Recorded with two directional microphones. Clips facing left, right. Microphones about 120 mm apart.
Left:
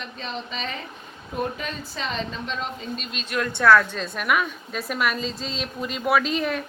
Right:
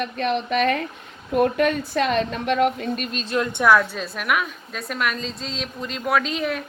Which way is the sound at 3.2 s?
30° right (ahead or behind).